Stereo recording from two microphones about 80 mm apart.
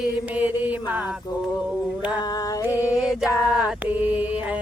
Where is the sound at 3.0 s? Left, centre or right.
Centre.